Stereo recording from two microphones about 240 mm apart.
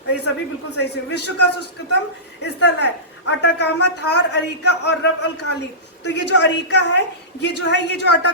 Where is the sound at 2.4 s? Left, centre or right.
Left.